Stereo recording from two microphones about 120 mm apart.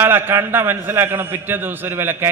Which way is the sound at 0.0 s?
15° right (ahead or behind).